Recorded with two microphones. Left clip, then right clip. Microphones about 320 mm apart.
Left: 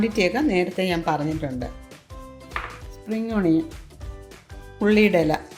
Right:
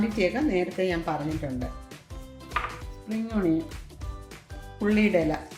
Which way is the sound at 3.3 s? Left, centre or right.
Left.